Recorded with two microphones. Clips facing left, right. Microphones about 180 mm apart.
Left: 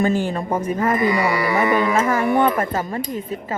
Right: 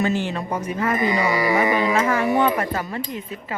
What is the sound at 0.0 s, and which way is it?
Speech, 45° left (ahead or behind).